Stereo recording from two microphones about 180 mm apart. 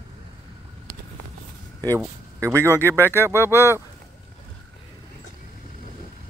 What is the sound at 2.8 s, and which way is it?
Speech, 15° right (ahead or behind).